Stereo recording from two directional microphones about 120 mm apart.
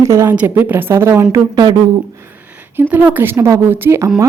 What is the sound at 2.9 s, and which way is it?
A woman's voice, 15° right (ahead or behind).